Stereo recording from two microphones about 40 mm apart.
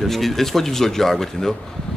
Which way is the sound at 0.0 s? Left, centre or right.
Centre.